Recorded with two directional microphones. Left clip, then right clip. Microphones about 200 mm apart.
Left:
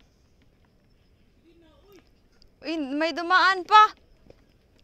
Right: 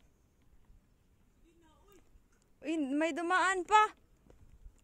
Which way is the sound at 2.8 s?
15° right (ahead or behind).